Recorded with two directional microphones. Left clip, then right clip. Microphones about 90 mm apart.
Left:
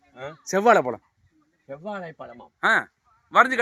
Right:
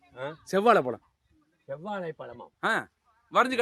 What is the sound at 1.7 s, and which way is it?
Speech, 50° right (ahead or behind).